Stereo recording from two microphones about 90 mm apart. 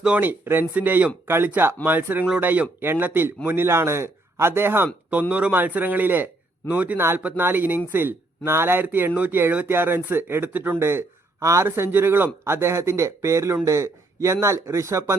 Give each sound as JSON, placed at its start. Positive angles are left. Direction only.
{"t": 0.0, "sound": "a man's voice", "side_deg": -15}